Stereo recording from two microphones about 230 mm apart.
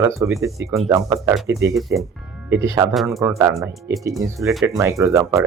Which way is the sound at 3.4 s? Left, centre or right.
Centre.